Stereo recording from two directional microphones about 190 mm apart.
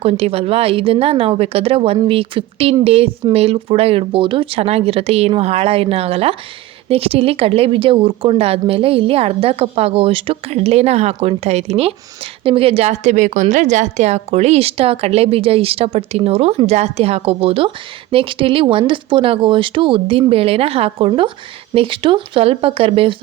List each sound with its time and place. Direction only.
0.0 s a woman's voice: 30° right (ahead or behind)